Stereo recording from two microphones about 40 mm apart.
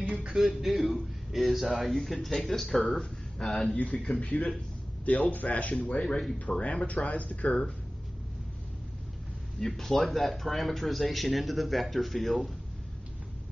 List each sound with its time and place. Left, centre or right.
0.3 s speech: centre
3.7 s a man's voice: left
5.9 s speech: centre
6.4 s a man's voice: left
9.6 s speech: centre